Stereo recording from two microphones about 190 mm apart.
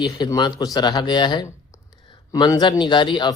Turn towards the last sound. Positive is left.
turn(degrees=25)  # may be behind; listen again after turning